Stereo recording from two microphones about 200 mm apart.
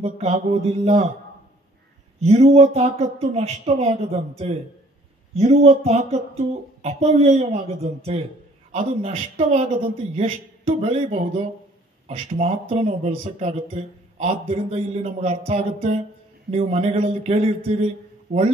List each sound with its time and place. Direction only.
0.0 s speech: 35° right (ahead or behind)
2.1 s speech: 30° right (ahead or behind)